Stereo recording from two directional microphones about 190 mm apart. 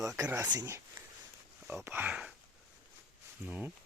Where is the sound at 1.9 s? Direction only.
10° right (ahead or behind).